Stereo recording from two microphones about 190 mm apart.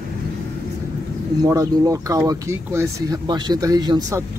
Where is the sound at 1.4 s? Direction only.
15° right (ahead or behind).